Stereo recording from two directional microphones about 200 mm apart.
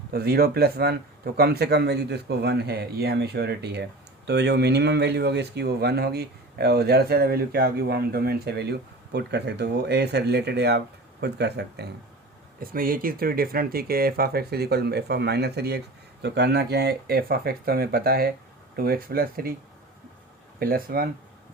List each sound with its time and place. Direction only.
0.1 s speech: 50° right (ahead or behind)
12.5 s speech: 45° right (ahead or behind)
20.6 s speech: 45° right (ahead or behind)